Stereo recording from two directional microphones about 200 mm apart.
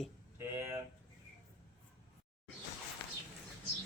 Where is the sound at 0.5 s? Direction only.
10° right (ahead or behind).